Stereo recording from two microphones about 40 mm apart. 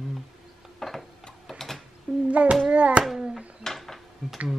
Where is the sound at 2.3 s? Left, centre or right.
Right.